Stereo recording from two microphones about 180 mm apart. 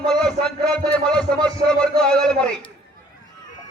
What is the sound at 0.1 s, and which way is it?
Music, 5° left (ahead or behind).